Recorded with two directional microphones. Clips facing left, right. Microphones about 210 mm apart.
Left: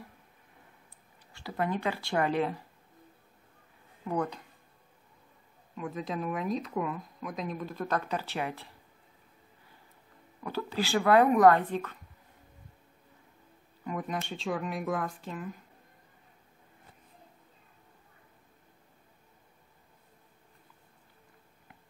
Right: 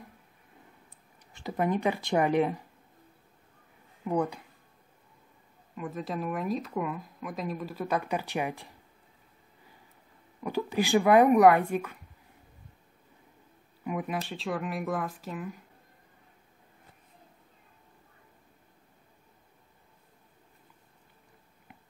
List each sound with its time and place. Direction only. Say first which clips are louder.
1.3 s speech: right 3 dB; 20° right (ahead or behind)
4.0 s speech: right 3 dB; 10° right (ahead or behind)
5.8 s speech: right 1 dB; centre (ahead or behind)
10.4 s speech: right 4 dB; 15° right (ahead or behind)
13.8 s speech: right 2 dB; 5° right (ahead or behind)